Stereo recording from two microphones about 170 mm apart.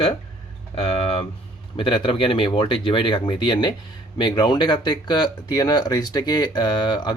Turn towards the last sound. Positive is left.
turn(degrees=25)  # may be behind; listen again after turning